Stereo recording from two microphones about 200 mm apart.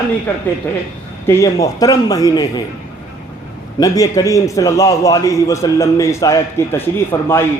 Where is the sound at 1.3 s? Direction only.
15° left (ahead or behind).